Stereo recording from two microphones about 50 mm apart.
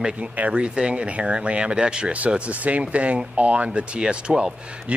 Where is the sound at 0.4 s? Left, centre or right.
Right.